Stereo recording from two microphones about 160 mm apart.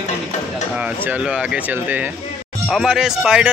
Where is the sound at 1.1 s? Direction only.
5° right (ahead or behind).